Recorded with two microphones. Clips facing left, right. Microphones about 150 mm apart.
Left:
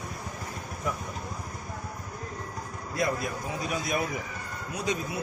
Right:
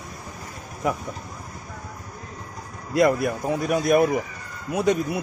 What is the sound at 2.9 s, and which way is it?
Speech, 65° right (ahead or behind).